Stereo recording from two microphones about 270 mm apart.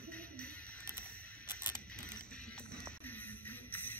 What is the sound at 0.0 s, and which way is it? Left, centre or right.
Music, centre.